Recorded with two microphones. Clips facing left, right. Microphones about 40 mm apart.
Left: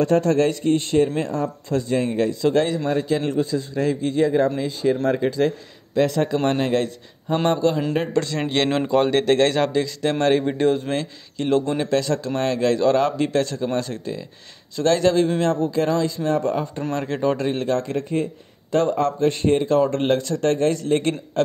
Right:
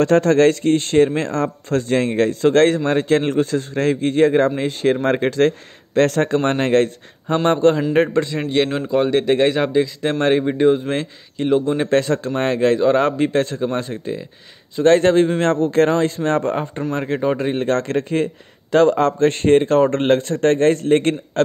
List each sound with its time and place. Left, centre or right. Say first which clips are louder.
0.0 s a man's voice: right 5 dB; right
6.3 s a man's voice: right 4 dB; right
8.1 s a man's voice: right 3 dB; right
8.8 s speech: right 1 dB; centre
9.2 s a man's voice: right 1 dB; centre; by 11.4 s right
11.4 s speech: right 3 dB; centre
11.8 s a man's voice: right 4 dB; right
14.9 s a man's voice: right 5 dB; right
16.9 s a man's voice: right 2 dB; right
17.6 s a man's voice: right 4 dB; right
19.2 s a man's voice: right 5 dB; right